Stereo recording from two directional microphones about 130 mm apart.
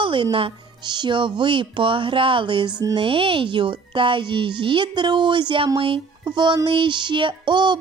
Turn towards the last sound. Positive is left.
turn(degrees=-35)  # may be behind; listen again after turning